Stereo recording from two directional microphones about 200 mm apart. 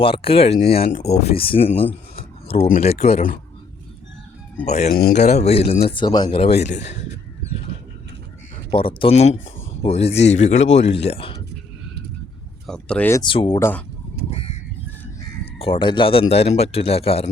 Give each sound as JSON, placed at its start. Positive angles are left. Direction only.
{"t": 0.0, "sound": "speech", "side_deg": 25}
{"t": 2.1, "sound": "a sound", "side_deg": 30}
{"t": 2.6, "sound": "speech", "side_deg": 35}
{"t": 4.6, "sound": "speech", "side_deg": 35}
{"t": 4.9, "sound": "speech", "side_deg": 50}
{"t": 5.2, "sound": "speech", "side_deg": 35}
{"t": 8.7, "sound": "speech", "side_deg": 25}
{"t": 12.6, "sound": "speech", "side_deg": 5}
{"t": 13.2, "sound": "speech", "side_deg": 25}
{"t": 14.3, "sound": "crow", "side_deg": 30}
{"t": 15.5, "sound": "speech", "side_deg": 25}